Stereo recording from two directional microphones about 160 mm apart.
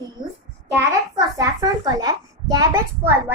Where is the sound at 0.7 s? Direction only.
20° right (ahead or behind).